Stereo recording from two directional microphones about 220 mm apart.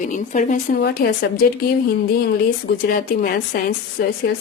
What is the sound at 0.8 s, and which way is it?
Speech, 45° left (ahead or behind).